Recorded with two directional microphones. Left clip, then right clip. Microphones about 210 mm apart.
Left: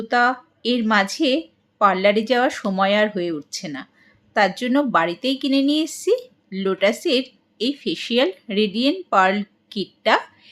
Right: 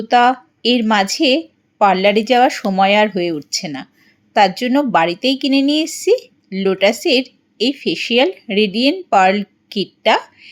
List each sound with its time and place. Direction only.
0.1 s speech: 20° right (ahead or behind)